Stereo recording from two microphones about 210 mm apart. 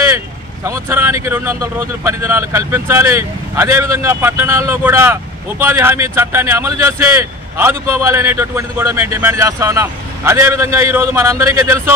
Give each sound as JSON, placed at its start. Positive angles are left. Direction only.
{"t": 0.7, "sound": "speech", "side_deg": -10}